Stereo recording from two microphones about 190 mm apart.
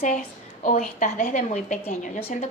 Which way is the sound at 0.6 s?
40° left (ahead or behind).